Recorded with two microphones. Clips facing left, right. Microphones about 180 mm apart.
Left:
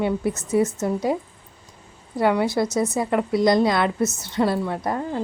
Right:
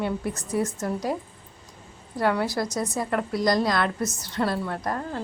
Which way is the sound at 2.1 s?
20° left (ahead or behind).